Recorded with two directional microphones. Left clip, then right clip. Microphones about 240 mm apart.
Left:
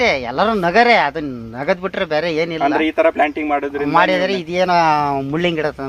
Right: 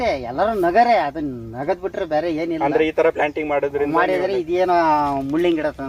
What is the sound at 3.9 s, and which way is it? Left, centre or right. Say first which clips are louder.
Speech: left 7 dB; left.